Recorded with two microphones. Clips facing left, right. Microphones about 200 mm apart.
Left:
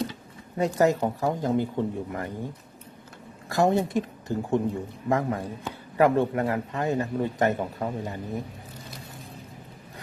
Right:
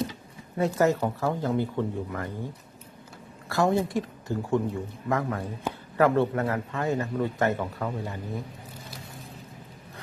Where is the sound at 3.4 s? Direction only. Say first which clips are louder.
Left 2 dB; 20° left (ahead or behind).